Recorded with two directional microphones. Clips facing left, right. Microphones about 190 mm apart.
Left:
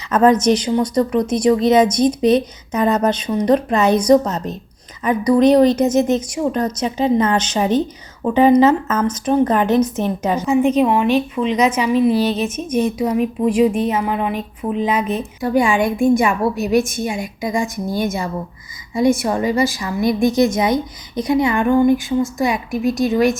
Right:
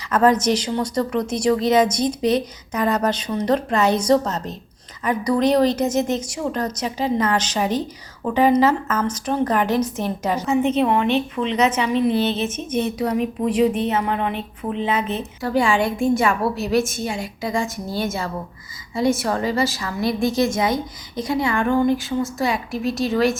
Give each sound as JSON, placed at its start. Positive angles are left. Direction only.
{"t": 0.1, "sound": "a woman's voice", "side_deg": 20}